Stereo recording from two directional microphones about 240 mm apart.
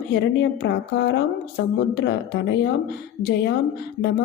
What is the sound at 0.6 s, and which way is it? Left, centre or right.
A woman's voice, left.